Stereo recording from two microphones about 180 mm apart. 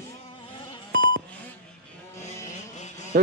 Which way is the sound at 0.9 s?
70° right (ahead or behind).